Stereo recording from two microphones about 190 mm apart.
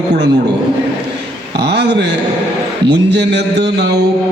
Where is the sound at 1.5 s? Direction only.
60° right (ahead or behind).